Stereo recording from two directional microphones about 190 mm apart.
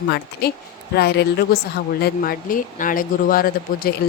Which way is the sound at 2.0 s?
50° left (ahead or behind).